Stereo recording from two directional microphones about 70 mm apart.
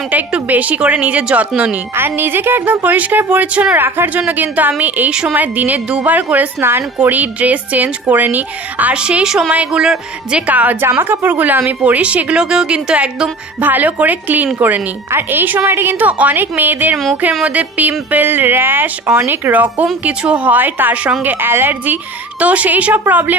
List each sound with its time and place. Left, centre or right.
0.1 s a woman's voice: right
2.0 s a woman's voice: right
22.4 s a woman's voice: right